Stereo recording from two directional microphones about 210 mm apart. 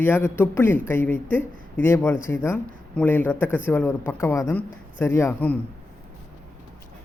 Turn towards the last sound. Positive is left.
turn(degrees=10)  # may be behind; listen again after turning